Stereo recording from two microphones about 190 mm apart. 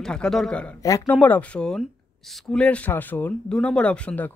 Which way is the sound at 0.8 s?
15° left (ahead or behind).